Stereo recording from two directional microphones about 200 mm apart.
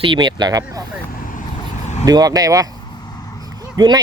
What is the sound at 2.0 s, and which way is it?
Speech, 20° right (ahead or behind).